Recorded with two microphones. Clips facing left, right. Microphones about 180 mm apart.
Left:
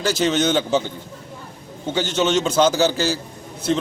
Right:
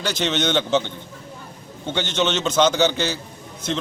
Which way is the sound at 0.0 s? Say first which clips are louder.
Left 4 dB; 5° left (ahead or behind).